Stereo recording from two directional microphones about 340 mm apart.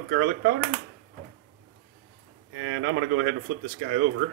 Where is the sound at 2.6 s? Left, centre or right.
Right.